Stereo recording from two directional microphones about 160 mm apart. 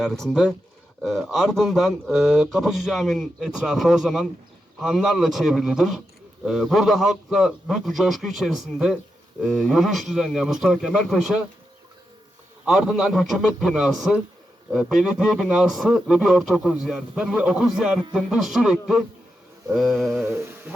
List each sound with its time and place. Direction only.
0.0 s a man's voice: centre (ahead or behind)
12.6 s a man's voice: 5° right (ahead or behind)
20.2 s mantra: 15° right (ahead or behind)